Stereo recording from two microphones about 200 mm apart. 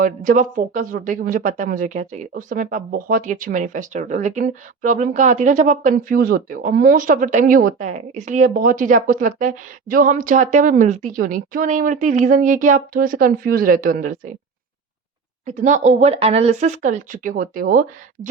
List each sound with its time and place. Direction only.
0.0 s speech: 40° right (ahead or behind)
15.4 s speech: 40° right (ahead or behind)